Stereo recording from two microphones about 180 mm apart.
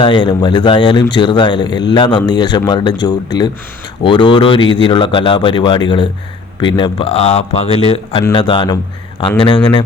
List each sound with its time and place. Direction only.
0.0 s speech: 25° left (ahead or behind)